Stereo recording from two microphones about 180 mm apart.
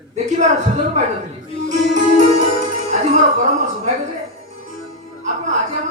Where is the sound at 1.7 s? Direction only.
40° right (ahead or behind).